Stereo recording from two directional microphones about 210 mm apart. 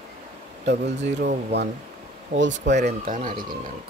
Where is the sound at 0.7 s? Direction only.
55° right (ahead or behind).